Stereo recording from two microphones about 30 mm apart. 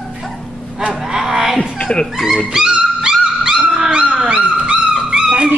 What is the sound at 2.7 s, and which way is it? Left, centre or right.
Dog, right.